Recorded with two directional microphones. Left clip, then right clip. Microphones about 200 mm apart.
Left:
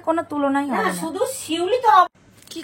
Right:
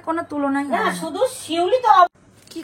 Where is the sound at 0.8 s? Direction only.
35° left (ahead or behind).